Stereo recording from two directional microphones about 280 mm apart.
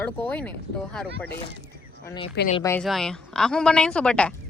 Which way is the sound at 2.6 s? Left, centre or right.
Centre.